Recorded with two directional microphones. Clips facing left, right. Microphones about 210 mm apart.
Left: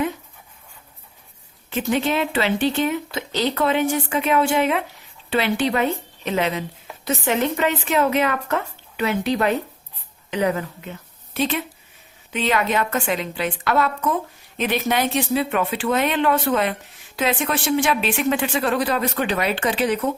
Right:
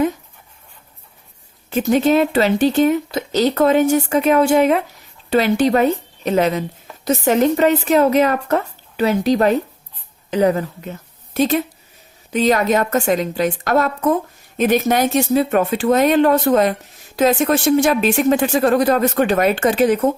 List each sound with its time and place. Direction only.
1.7 s a woman's voice: 40° right (ahead or behind)